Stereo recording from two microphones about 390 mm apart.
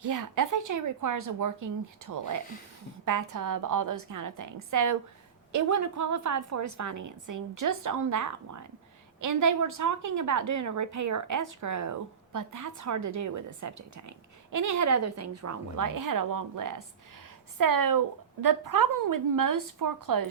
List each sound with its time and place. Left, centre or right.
0.0 s a woman's voice: right